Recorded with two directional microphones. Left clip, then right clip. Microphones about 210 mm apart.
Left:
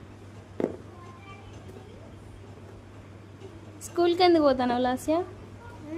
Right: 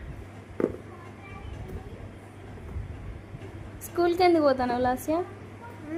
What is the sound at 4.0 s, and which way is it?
A woman's voice, 30° left (ahead or behind).